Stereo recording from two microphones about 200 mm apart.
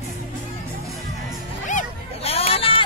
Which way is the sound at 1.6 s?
35° left (ahead or behind).